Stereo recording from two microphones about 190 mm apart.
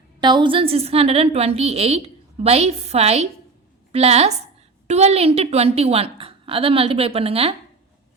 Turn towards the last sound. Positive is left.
turn(degrees=-30)  # may be behind; listen again after turning